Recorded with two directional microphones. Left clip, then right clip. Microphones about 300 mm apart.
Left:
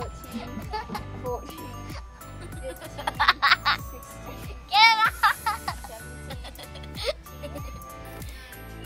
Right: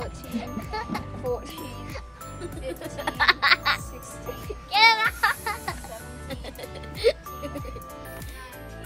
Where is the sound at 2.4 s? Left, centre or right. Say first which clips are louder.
Right 3 dB; centre.